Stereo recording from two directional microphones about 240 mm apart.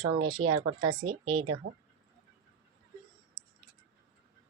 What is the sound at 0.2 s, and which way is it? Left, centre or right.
Speech, right.